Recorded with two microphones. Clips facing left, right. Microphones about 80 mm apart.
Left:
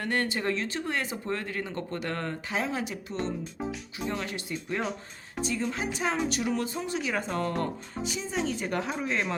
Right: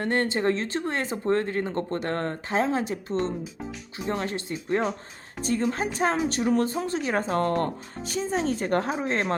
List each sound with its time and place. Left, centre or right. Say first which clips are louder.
0.0 s a woman's voice: right 5 dB; right